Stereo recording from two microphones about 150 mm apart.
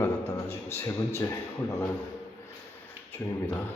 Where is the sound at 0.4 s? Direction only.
15° left (ahead or behind).